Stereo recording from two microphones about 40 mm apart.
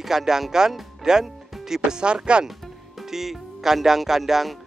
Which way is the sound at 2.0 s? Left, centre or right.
Right.